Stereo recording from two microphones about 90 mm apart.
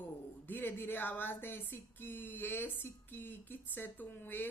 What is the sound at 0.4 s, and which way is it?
Speech, 20° left (ahead or behind).